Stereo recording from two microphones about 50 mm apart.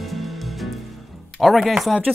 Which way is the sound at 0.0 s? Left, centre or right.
Centre.